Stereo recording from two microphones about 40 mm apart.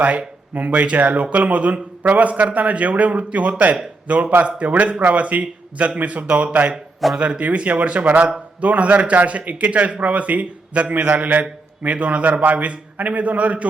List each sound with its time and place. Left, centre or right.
0.0 s a man's voice: right